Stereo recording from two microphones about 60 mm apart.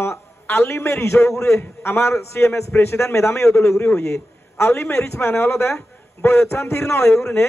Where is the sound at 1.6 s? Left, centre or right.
Left.